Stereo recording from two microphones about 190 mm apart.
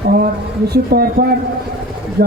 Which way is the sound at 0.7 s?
50° right (ahead or behind).